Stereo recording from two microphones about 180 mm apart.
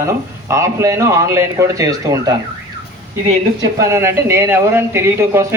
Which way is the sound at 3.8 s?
15° right (ahead or behind).